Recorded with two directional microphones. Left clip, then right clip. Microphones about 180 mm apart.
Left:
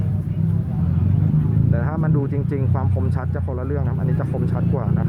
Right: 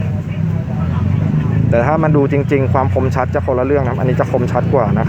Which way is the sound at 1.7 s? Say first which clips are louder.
Right 17 dB; 30° right (ahead or behind).